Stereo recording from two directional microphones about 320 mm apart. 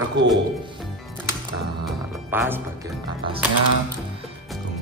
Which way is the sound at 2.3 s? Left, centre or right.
Centre.